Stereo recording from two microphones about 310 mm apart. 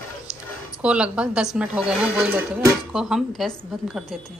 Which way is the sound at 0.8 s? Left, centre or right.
Centre.